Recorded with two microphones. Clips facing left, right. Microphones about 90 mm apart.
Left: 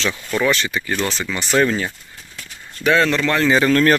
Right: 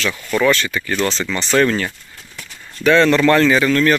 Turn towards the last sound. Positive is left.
turn(degrees=40)  # may be behind; listen again after turning